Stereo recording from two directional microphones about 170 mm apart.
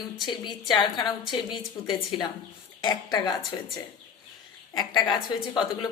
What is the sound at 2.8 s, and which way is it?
Speech, 25° left (ahead or behind).